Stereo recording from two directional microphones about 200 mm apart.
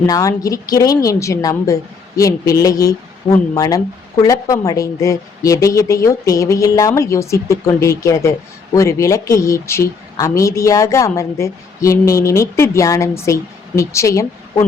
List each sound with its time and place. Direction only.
0.1 s a woman's voice: 15° left (ahead or behind)